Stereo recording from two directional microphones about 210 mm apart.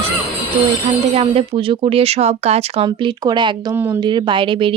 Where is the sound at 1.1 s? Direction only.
30° right (ahead or behind).